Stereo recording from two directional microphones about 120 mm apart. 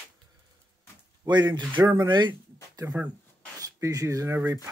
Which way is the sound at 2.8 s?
15° right (ahead or behind).